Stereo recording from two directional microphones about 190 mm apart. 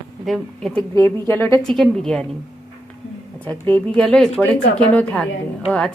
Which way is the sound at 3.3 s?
10° left (ahead or behind).